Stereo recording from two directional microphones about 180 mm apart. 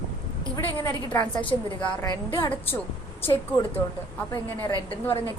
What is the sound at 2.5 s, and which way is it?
Speech, 10° left (ahead or behind).